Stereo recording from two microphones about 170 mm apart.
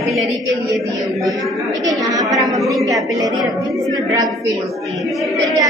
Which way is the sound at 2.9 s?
20° right (ahead or behind).